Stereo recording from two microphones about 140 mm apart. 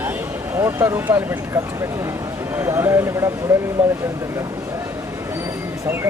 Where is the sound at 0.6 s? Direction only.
20° right (ahead or behind).